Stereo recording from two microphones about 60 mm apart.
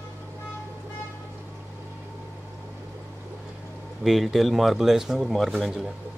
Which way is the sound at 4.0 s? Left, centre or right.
Centre.